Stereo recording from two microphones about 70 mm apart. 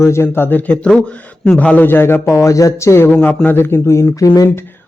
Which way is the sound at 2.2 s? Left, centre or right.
Left.